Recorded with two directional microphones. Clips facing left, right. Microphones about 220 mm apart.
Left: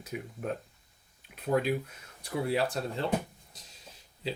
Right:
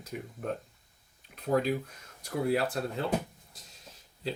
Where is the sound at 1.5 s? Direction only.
Centre (ahead or behind).